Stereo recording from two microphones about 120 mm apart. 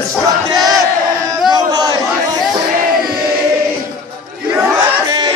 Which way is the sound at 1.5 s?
35° right (ahead or behind).